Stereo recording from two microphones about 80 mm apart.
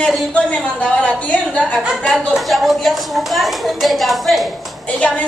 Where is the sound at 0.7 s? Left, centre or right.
Centre.